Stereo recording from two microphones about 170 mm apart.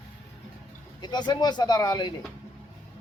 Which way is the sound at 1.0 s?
25° left (ahead or behind).